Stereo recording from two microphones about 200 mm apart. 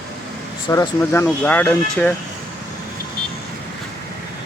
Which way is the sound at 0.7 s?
15° left (ahead or behind).